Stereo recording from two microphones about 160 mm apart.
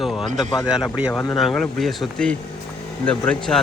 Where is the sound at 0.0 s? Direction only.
Centre (ahead or behind).